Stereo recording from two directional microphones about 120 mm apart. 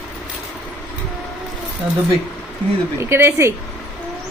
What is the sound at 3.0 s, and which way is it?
Speech, 20° right (ahead or behind).